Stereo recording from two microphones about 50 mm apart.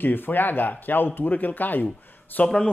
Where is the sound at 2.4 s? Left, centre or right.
Left.